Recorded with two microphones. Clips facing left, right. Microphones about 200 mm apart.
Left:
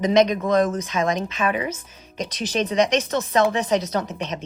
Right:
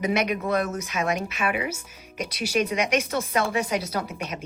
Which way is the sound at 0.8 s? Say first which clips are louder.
Left 4 dB; 10° right (ahead or behind).